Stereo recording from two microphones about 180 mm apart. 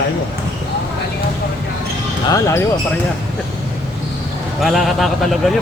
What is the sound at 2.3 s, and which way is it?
Speech, 15° left (ahead or behind).